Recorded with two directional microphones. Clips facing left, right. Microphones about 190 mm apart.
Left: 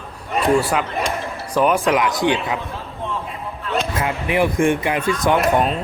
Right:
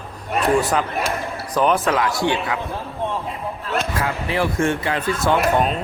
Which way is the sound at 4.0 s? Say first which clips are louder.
Left 5 dB; 15° left (ahead or behind).